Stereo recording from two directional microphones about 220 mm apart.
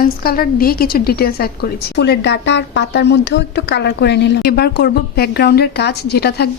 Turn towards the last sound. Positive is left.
turn(degrees=45)  # may be behind; listen again after turning